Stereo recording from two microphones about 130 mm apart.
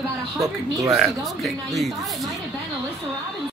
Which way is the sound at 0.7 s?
25° right (ahead or behind).